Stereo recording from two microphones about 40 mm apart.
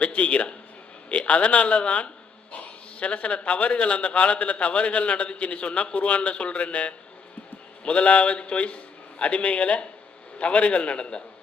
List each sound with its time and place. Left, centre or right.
0.0 s a man's voice: left